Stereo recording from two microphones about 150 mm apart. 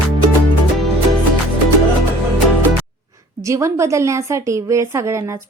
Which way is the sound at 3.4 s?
20° right (ahead or behind).